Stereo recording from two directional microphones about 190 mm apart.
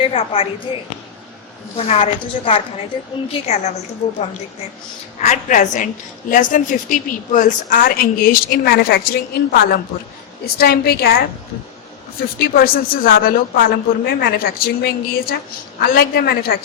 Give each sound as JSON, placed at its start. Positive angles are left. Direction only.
{"t": 0.0, "sound": "a woman's voice", "side_deg": 30}
{"t": 5.2, "sound": "a woman's voice", "side_deg": 40}
{"t": 12.4, "sound": "a woman's voice", "side_deg": 50}